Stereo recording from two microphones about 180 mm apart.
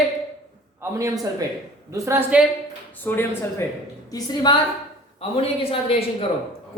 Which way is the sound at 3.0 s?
10° left (ahead or behind).